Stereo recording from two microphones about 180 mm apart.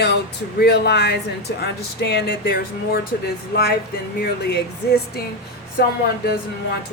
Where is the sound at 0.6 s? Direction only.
65° left (ahead or behind).